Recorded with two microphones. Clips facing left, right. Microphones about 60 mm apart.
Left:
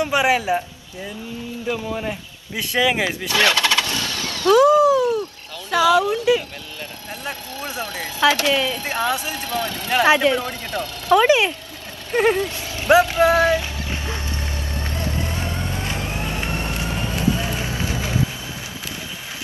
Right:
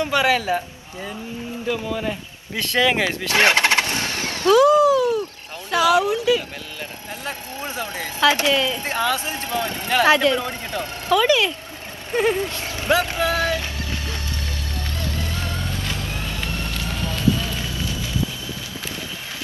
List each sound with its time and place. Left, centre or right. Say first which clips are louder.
0.0 s a man's voice: left 1 dB; centre
1.7 s a man's voice: right 1 dB; left
3.3 s gobble: right 2 dB; right
4.6 s cat: left 1 dB; left
5.9 s speech: left 1 dB; right
7.6 s speech: even; right
8.8 s speech: even; left
9.2 s speech: even; right
9.8 s speech: left 1 dB; left
10.4 s speech: left 1 dB; right
11.1 s speech: left 3 dB; left
13.2 s music: left 6 dB; left
15.0 s vehicle: left 2 dB; left